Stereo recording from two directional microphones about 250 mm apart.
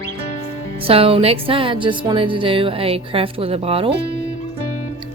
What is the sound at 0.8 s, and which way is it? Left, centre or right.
Speech, right.